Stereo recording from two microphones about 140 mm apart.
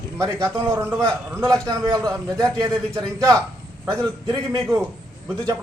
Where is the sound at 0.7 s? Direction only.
20° right (ahead or behind).